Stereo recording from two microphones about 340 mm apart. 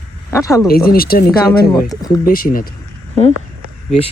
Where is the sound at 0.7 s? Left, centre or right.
Left.